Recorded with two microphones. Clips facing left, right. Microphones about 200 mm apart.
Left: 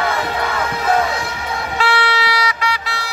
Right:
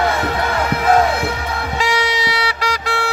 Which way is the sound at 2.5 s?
40° right (ahead or behind).